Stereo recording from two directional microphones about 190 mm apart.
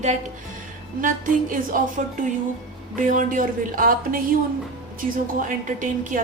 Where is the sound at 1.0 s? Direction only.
45° right (ahead or behind).